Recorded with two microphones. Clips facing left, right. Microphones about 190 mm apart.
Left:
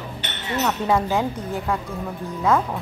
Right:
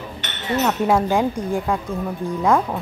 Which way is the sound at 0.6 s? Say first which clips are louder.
Right 2 dB; 15° right (ahead or behind).